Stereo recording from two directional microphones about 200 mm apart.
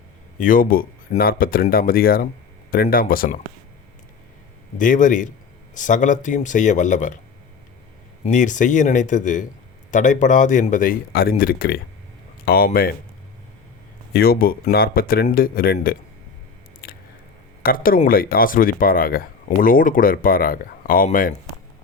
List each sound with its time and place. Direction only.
0.3 s speech: 45° left (ahead or behind)
4.8 s speech: 40° left (ahead or behind)
8.2 s speech: 40° left (ahead or behind)
14.1 s speech: 50° left (ahead or behind)
16.8 s biting: 45° left (ahead or behind)
17.6 s speech: 45° left (ahead or behind)